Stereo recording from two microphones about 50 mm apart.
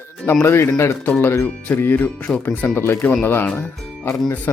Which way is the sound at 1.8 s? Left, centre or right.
Left.